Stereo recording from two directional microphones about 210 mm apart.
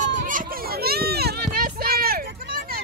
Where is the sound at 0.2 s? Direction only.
40° right (ahead or behind).